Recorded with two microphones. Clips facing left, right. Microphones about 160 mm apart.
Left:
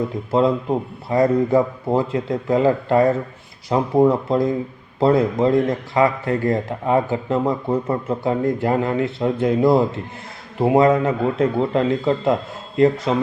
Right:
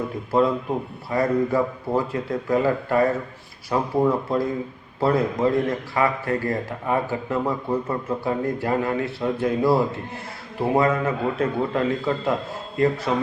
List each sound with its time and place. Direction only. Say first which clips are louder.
0.3 s speech: left 3 dB; 25° left (ahead or behind)
10.8 s speech: left 5 dB; 25° left (ahead or behind)